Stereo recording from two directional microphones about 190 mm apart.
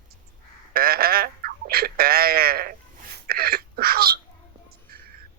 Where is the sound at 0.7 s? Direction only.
50° right (ahead or behind).